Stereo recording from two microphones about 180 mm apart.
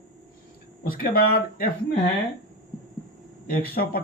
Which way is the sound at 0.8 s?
50° left (ahead or behind).